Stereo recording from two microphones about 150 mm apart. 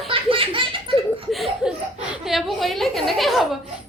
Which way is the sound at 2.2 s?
Centre (ahead or behind).